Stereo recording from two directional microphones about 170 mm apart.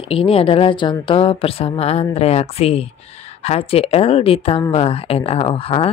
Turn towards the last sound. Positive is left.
turn(degrees=35)  # may be behind; listen again after turning